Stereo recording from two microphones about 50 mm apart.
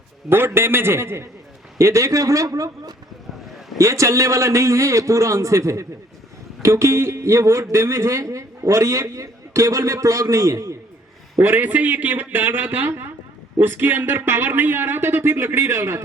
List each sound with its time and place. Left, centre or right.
0.3 s speech: right
1.8 s speech: right
3.8 s speech: right
11.3 s speech: right